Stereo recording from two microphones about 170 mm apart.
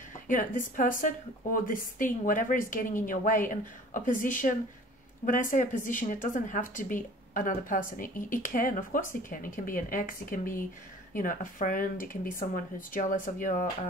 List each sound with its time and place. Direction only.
0.3 s a woman's voice: 50° left (ahead or behind)